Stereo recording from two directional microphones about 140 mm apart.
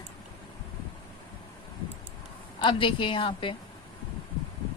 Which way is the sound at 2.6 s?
35° left (ahead or behind).